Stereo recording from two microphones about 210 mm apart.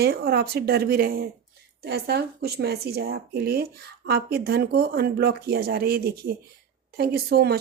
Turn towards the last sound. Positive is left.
turn(degrees=-50)  # may be behind; listen again after turning